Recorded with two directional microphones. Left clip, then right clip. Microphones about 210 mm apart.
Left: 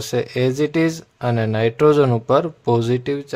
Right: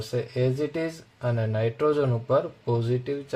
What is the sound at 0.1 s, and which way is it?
Speech, 40° left (ahead or behind).